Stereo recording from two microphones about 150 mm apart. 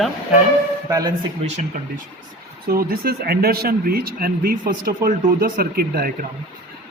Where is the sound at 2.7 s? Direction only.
85° right.